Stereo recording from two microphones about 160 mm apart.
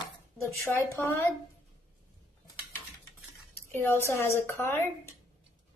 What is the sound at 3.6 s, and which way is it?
A woman's voice, 15° left (ahead or behind).